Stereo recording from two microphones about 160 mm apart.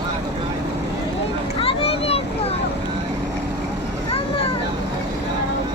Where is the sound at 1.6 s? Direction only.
35° left (ahead or behind).